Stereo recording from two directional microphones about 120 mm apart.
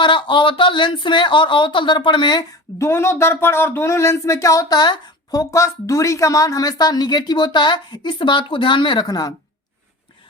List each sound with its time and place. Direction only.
0.0 s speech: 40° left (ahead or behind)
2.7 s speech: 20° left (ahead or behind)